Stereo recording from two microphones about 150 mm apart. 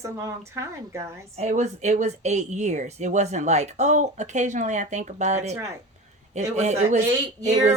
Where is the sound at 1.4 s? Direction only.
50° right (ahead or behind).